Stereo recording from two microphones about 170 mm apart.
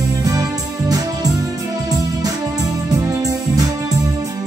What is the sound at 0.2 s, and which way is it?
Music, 20° right (ahead or behind).